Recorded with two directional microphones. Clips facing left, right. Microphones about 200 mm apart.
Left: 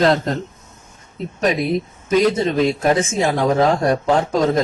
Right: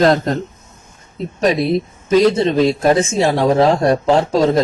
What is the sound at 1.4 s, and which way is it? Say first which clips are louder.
Speech: right 3 dB; 35° right (ahead or behind).